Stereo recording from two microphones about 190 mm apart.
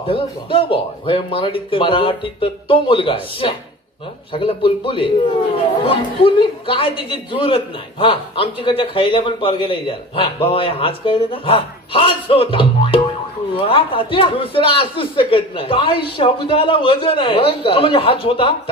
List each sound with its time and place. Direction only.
0.0 s speech: 30° left (ahead or behind)